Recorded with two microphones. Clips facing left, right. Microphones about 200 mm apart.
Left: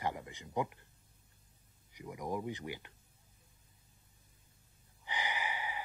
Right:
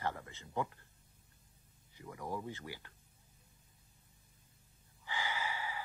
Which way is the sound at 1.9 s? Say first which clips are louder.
Left 3 dB; 15° left (ahead or behind).